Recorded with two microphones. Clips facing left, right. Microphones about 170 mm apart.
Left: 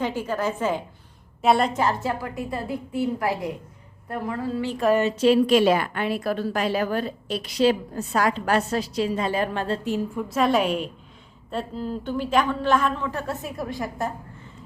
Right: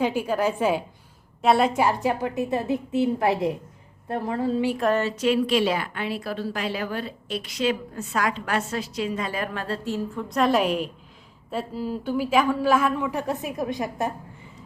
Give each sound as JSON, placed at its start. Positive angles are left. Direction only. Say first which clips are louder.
{"t": 0.0, "sound": "a woman's voice", "louder": "right 2 dB", "side_deg": -10}
{"t": 1.4, "sound": "a woman's voice", "louder": "right 1 dB", "side_deg": 0}
{"t": 5.1, "sound": "a woman's voice", "louder": "left 4 dB", "side_deg": 30}
{"t": 5.5, "sound": "a woman's voice", "louder": "left 4 dB", "side_deg": 50}
{"t": 10.2, "sound": "a woman's voice", "louder": "right 1 dB", "side_deg": 0}